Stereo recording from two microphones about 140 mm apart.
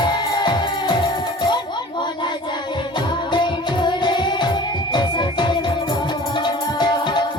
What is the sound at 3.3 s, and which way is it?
Music, 35° left (ahead or behind).